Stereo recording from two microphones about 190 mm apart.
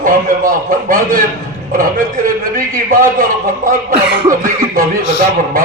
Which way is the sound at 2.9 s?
50° right (ahead or behind).